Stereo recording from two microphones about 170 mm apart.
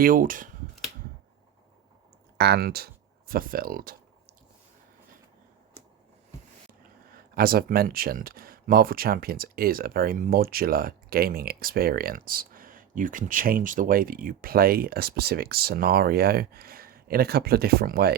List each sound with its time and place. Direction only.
0.0 s speech: 55° right (ahead or behind)
2.4 s speech: 70° right (ahead or behind)
7.1 s speech: 60° right (ahead or behind)